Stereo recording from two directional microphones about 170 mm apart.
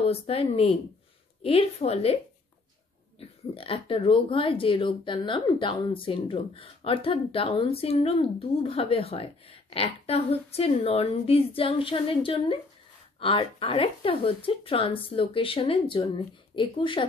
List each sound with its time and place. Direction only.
0.0 s speech: 35° left (ahead or behind)
3.2 s speech: 35° left (ahead or behind)